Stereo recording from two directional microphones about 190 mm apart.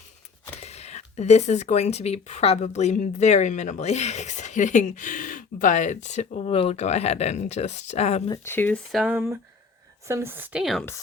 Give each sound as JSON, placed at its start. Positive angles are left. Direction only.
{"t": 0.6, "sound": "speech", "side_deg": 35}
{"t": 8.3, "sound": "speech", "side_deg": 10}